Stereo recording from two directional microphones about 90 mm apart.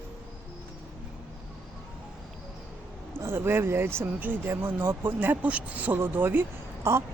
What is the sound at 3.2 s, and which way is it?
Speech, 30° right (ahead or behind).